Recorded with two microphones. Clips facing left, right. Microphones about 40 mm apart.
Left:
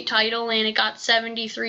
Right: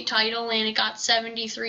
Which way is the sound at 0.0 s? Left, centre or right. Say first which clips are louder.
Left 3 dB; centre.